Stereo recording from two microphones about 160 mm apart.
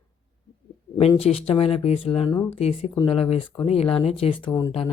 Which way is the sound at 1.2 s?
40° left (ahead or behind).